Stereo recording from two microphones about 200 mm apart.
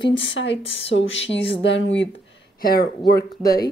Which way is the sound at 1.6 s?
60° left (ahead or behind).